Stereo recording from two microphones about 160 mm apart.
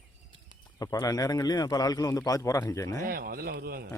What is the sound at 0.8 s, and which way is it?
A man's voice, 20° left (ahead or behind).